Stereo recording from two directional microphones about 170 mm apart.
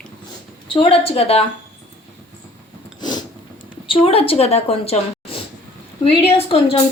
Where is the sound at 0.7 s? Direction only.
30° left (ahead or behind).